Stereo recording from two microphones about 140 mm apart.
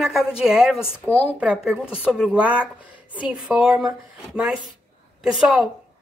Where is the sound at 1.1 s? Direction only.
10° left (ahead or behind).